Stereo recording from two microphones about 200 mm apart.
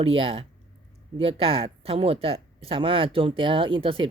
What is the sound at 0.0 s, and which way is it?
Speech, 25° right (ahead or behind).